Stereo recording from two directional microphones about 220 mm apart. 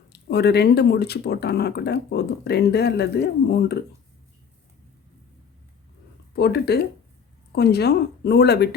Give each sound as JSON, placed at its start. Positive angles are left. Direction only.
{"t": 0.1, "sound": "speech", "side_deg": 50}
{"t": 6.3, "sound": "speech", "side_deg": 45}